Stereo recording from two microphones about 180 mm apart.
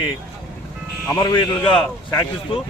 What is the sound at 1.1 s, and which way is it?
A man's voice, 20° left (ahead or behind).